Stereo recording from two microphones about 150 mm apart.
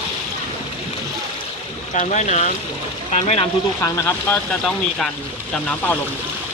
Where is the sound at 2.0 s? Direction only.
50° left (ahead or behind).